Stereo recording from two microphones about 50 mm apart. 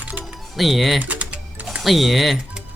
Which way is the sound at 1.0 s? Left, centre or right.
Right.